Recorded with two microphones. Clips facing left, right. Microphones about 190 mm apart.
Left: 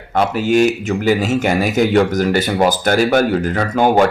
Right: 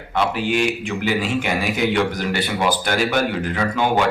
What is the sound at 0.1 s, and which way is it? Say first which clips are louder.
A man's voice: left 6 dB; 45° left (ahead or behind).